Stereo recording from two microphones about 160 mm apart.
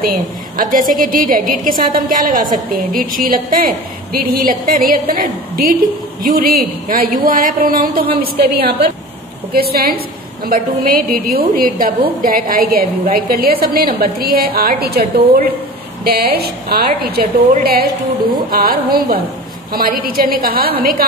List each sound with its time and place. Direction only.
0.6 s a woman's voice: 60° right (ahead or behind)